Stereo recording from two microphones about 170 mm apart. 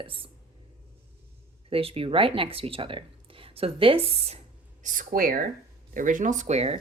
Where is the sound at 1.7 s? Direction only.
35° right (ahead or behind).